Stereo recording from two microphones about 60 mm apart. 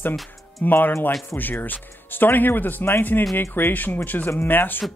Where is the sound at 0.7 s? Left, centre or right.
Left.